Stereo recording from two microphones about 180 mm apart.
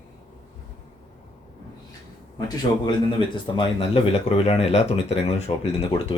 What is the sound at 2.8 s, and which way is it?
Speech, 30° left (ahead or behind).